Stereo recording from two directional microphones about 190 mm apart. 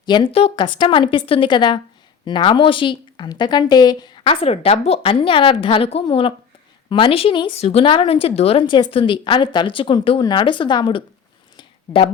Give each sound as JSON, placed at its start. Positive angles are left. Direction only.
{"t": 0.0, "sound": "a woman's voice", "side_deg": 25}